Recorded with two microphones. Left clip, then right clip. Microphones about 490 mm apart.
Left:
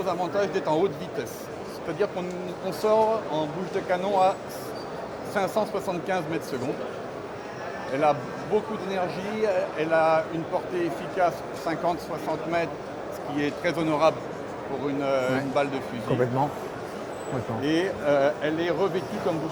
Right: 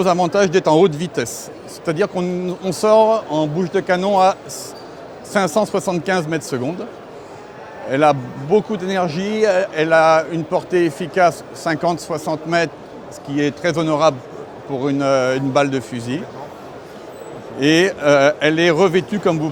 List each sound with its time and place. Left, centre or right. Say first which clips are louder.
0.0 s speech: right 11 dB; right
7.9 s speech: right 9 dB; right
14.8 s speech: right 9 dB; right
17.6 s speech: right 13 dB; right